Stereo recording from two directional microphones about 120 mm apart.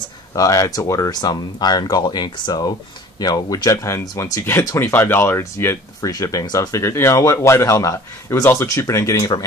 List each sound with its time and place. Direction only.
0.3 s speech: 30° left (ahead or behind)